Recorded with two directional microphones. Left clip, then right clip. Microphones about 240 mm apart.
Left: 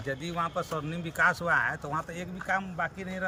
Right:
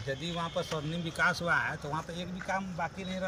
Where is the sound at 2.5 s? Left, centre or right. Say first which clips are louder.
Left 4 dB; left.